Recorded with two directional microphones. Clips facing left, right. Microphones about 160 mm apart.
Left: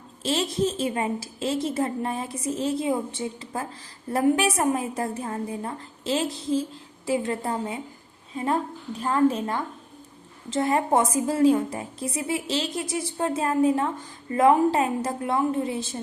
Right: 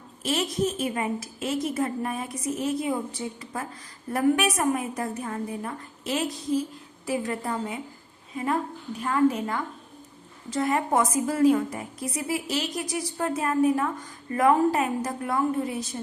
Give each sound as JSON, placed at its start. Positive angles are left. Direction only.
{"t": 0.2, "sound": "a woman's voice", "side_deg": 30}
{"t": 9.0, "sound": "a woman's voice", "side_deg": 30}